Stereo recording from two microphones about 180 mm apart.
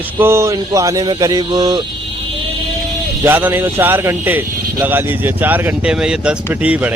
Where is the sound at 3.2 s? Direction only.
10° right (ahead or behind).